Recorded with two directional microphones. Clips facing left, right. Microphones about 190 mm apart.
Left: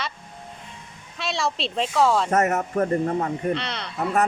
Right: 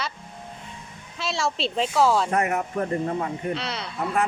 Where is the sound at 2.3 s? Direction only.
45° left (ahead or behind).